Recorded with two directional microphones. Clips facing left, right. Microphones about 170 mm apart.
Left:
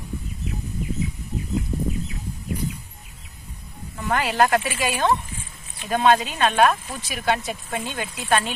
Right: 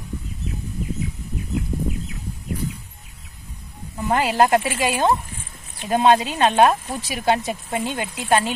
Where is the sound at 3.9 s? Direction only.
30° right (ahead or behind).